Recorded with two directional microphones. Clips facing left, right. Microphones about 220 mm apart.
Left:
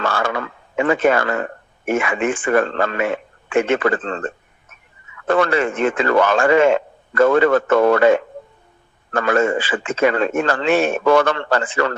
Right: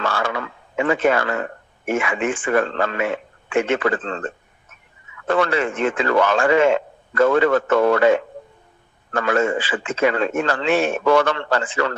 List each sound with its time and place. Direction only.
0.0 s a sound: 50° left (ahead or behind)
1.9 s a man's voice: 50° left (ahead or behind)
5.3 s a man's voice: 50° left (ahead or behind)